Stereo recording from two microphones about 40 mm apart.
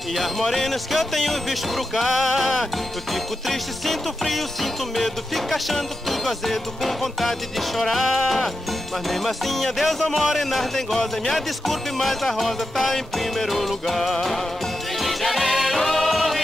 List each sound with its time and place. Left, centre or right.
0.1 s speech: centre
15.0 s music: centre